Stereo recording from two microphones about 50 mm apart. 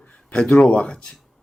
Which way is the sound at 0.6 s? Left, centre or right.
Left.